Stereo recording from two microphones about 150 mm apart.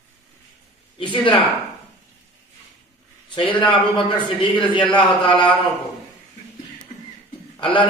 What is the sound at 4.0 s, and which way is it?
A man's voice, 35° left (ahead or behind).